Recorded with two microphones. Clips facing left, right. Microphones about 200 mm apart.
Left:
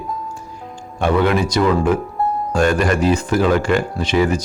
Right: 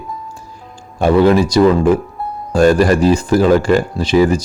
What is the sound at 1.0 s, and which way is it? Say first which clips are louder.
Speech: right 6 dB; 35° right (ahead or behind).